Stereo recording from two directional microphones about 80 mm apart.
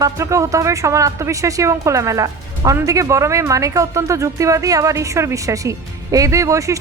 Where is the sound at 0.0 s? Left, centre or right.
Right.